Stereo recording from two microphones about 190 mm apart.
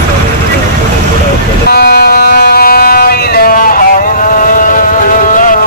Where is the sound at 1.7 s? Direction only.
55° left (ahead or behind).